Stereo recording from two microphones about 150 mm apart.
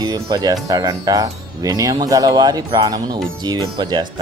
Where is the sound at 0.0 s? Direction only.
25° right (ahead or behind).